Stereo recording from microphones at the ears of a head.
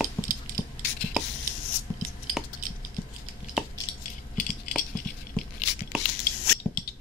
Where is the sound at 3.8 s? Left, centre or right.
Left.